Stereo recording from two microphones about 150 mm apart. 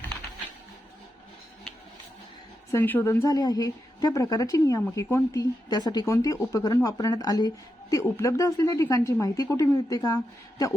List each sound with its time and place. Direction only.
2.7 s speech: 15° left (ahead or behind)